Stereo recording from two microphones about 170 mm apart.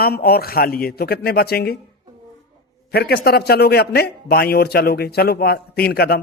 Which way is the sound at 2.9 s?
65° left (ahead or behind).